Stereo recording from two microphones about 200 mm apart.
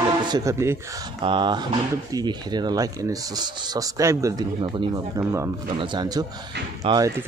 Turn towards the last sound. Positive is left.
turn(degrees=-25)  # may be behind; listen again after turning